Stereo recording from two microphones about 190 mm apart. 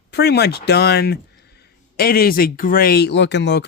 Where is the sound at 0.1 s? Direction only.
60° left (ahead or behind).